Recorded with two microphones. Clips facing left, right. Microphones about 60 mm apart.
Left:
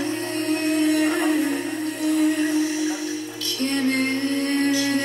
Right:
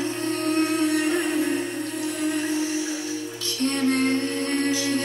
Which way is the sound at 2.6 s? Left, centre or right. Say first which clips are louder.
Left 3 dB; left.